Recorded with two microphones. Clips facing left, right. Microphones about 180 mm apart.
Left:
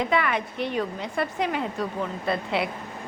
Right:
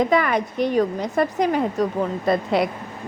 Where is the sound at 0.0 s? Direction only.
40° right (ahead or behind).